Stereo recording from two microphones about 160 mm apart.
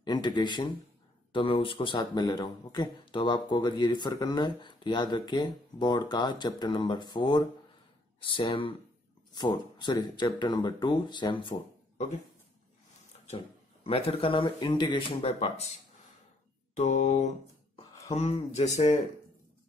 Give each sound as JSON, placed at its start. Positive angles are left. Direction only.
{"t": 0.0, "sound": "speech", "side_deg": 30}
{"t": 13.8, "sound": "speech", "side_deg": 35}
{"t": 16.7, "sound": "mantra", "side_deg": 45}
{"t": 18.1, "sound": "speech", "side_deg": 40}